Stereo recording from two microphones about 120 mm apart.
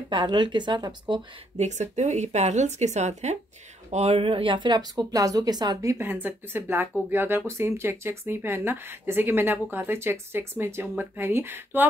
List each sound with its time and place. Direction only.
0.1 s speech: 40° right (ahead or behind)
1.6 s speech: 75° right (ahead or behind)
3.9 s speech: 60° right (ahead or behind); by 11.9 s 15° right (ahead or behind)